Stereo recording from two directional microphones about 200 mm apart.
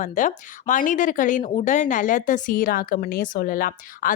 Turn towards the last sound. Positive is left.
turn(degrees=45)  # may be behind; listen again after turning